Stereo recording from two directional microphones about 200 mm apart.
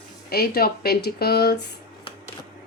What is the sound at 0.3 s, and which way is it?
Speech, 50° left (ahead or behind).